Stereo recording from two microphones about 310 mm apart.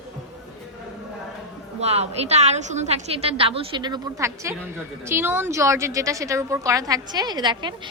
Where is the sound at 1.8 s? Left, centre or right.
Centre.